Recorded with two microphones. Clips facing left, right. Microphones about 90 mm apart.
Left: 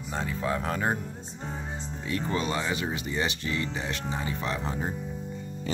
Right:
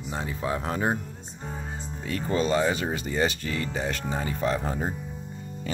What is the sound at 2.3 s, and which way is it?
Speech, 35° right (ahead or behind).